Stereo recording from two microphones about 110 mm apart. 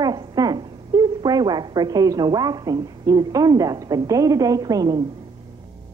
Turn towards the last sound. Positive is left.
turn(degrees=-35)  # may be behind; listen again after turning